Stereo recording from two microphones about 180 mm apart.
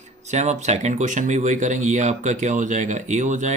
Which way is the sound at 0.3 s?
40° right (ahead or behind).